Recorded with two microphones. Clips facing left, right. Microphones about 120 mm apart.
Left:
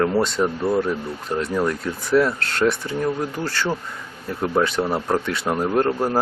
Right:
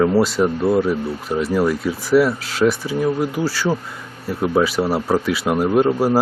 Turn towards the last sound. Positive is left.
turn(degrees=-5)  # may be behind; listen again after turning